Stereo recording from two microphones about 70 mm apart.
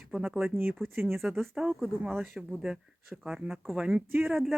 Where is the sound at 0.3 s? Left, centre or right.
Right.